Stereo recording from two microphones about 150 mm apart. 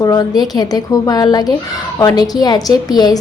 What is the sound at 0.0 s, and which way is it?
A woman's voice, 25° left (ahead or behind).